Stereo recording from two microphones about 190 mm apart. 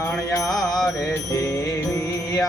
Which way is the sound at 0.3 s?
20° left (ahead or behind).